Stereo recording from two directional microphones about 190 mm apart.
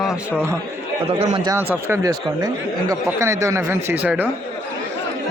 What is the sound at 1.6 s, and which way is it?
Speech, 15° right (ahead or behind).